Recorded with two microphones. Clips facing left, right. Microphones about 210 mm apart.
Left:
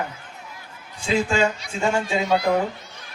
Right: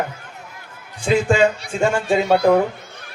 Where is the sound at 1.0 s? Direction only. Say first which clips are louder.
Right 5 dB; 55° right (ahead or behind).